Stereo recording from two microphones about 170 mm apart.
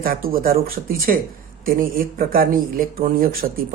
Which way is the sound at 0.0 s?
60° right (ahead or behind).